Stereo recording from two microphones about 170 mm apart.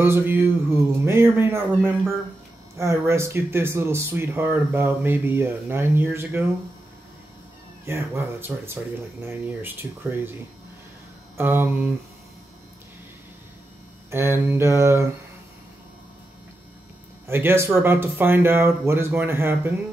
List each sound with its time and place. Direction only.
0.0 s speech: 10° right (ahead or behind)
7.8 s speech: 15° right (ahead or behind)
11.3 s speech: 10° right (ahead or behind)
14.1 s speech: 15° right (ahead or behind)
17.3 s speech: 15° right (ahead or behind)